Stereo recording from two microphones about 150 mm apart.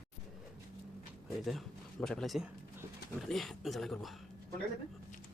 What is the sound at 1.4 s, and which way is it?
Speech, centre (ahead or behind).